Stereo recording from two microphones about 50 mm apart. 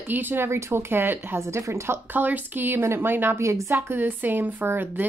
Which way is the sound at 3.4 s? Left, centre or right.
Right.